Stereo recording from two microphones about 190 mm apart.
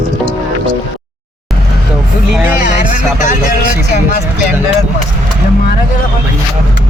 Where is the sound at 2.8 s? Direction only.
40° left (ahead or behind).